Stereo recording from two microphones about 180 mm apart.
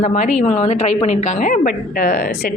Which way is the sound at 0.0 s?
40° left (ahead or behind).